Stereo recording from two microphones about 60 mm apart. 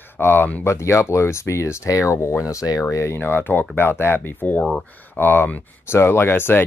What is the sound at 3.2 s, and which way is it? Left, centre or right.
Speech, left.